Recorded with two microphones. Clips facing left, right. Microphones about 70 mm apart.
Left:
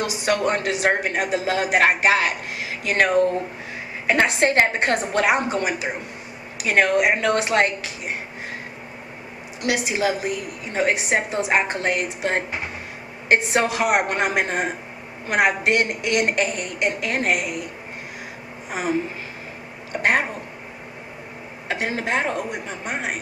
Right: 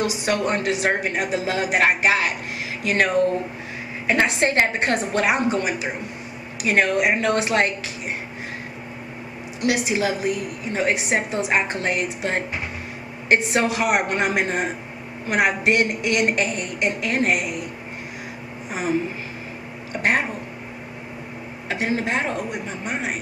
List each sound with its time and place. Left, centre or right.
0.0 s speech: left
4.1 s speech: left
9.7 s speech: left
16.3 s speech: left
18.7 s speech: left
21.6 s speech: left